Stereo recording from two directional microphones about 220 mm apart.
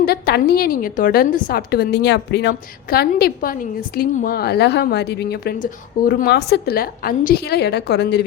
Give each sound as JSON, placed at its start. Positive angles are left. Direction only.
{"t": 0.0, "sound": "a woman's voice", "side_deg": 45}